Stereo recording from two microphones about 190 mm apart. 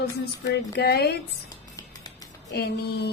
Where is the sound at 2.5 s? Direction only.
60° left (ahead or behind).